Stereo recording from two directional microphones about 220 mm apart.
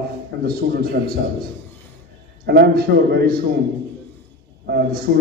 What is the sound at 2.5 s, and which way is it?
Speech, 45° right (ahead or behind).